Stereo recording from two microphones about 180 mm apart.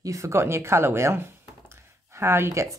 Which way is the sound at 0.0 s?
15° right (ahead or behind).